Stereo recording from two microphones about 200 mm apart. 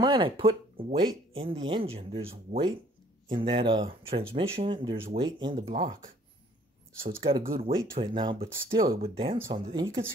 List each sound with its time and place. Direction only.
0.0 s speech: 25° right (ahead or behind)
7.4 s speech: 45° right (ahead or behind)
8.0 s speech: 25° right (ahead or behind)